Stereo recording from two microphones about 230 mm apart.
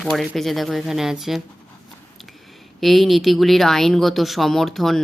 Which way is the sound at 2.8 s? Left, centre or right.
Centre.